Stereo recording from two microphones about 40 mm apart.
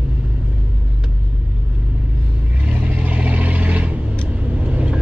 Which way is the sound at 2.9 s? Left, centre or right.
Right.